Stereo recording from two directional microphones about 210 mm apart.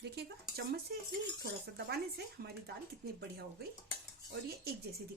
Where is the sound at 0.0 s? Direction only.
50° right (ahead or behind).